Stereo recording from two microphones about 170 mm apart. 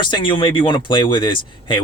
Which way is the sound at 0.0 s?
30° left (ahead or behind).